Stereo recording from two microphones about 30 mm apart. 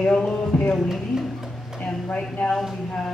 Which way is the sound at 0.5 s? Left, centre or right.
Left.